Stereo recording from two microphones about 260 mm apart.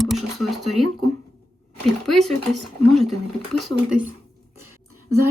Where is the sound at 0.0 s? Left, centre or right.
Centre.